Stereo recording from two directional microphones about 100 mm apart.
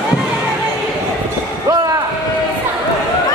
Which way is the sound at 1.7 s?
35° right (ahead or behind).